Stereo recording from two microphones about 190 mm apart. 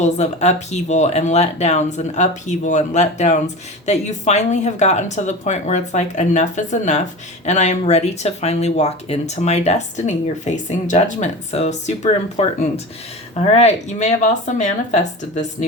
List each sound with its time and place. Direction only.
0.0 s speech: 35° left (ahead or behind)